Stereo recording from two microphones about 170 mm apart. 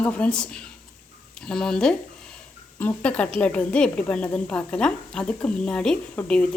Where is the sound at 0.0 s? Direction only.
5° left (ahead or behind).